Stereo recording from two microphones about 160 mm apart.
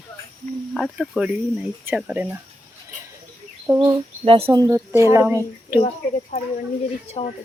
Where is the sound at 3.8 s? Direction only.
30° right (ahead or behind); by 5.3 s 15° right (ahead or behind).